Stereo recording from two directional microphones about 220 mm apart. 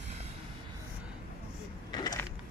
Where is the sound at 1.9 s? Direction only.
20° left (ahead or behind).